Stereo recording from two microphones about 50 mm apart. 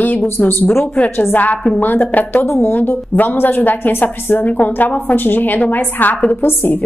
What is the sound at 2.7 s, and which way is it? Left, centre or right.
A woman's voice, left.